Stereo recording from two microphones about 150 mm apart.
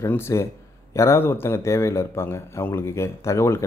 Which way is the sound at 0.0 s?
20° left (ahead or behind).